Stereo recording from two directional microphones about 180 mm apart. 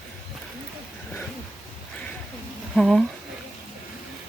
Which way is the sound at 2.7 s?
Centre (ahead or behind).